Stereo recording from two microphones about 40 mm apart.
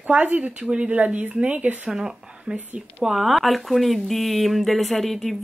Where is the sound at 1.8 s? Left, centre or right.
Centre.